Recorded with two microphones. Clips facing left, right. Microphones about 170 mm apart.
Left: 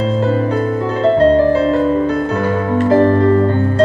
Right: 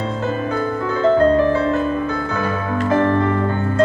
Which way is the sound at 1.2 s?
35° left (ahead or behind).